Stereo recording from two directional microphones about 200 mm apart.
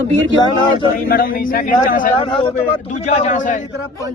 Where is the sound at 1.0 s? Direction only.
45° left (ahead or behind).